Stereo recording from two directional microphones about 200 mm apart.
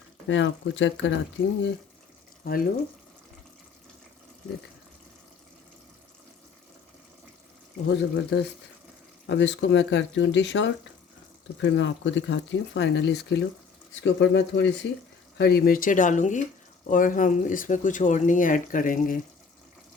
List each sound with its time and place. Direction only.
0.3 s speech: 65° left (ahead or behind)
2.4 s speech: 45° left (ahead or behind)
7.9 s speech: 60° left (ahead or behind); by 19.2 s 45° left (ahead or behind)